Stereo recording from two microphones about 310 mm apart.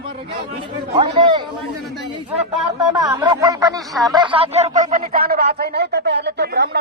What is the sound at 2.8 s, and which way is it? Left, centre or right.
Speech, centre.